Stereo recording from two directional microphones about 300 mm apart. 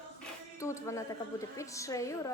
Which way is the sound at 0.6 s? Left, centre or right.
Centre.